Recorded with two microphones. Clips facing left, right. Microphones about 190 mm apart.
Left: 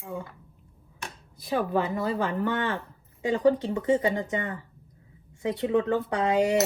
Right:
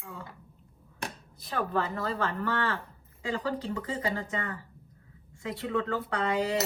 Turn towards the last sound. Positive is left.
turn(degrees=20)  # may be behind; listen again after turning